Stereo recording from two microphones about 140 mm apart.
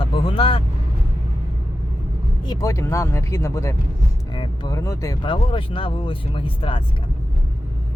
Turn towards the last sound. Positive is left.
turn(degrees=40)  # may be behind; listen again after turning